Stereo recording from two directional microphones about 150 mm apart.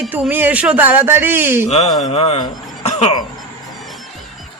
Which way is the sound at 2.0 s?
45° left (ahead or behind).